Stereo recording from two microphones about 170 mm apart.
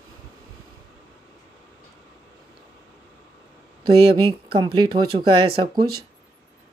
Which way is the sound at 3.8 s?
30° right (ahead or behind).